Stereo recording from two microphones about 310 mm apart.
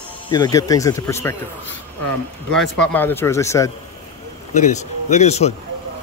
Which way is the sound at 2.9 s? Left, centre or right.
Centre.